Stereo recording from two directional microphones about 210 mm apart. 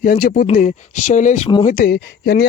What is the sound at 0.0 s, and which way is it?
Speech, 45° left (ahead or behind).